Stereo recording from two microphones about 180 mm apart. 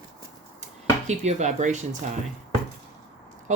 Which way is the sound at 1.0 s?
40° right (ahead or behind).